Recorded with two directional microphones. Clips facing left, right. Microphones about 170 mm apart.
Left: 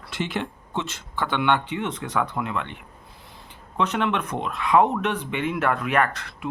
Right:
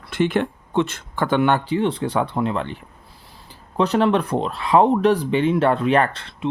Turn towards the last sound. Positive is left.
turn(degrees=-30)  # may be behind; listen again after turning